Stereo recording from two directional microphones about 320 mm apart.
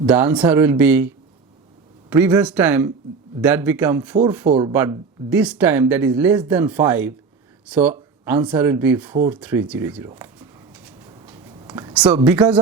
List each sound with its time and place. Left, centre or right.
0.0 s speech: centre
4.7 s speech: centre
10.8 s a sound: centre